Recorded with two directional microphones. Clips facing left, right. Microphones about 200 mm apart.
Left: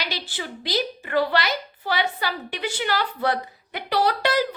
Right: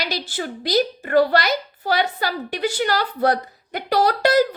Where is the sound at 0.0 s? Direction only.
40° right (ahead or behind).